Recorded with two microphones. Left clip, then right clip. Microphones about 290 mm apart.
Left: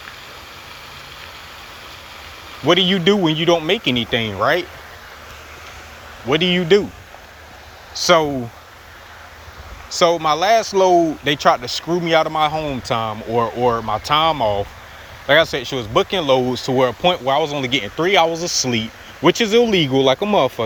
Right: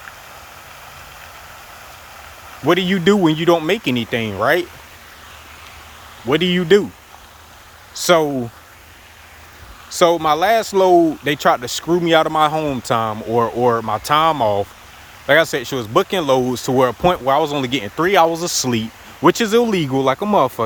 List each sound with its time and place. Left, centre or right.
2.6 s speech: centre
6.2 s speech: centre
8.0 s speech: centre
9.9 s speech: centre